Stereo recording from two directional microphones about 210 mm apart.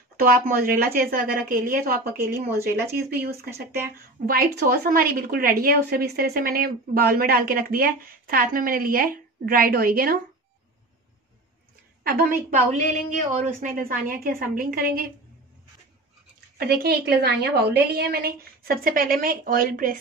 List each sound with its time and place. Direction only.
0.2 s a woman's voice: 40° right (ahead or behind)
12.0 s a woman's voice: 45° right (ahead or behind)
13.6 s a woman's voice: 40° right (ahead or behind)
16.5 s a woman's voice: 45° right (ahead or behind)